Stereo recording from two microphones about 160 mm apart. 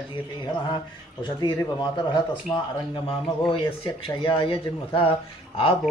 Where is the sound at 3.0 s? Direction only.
35° left (ahead or behind).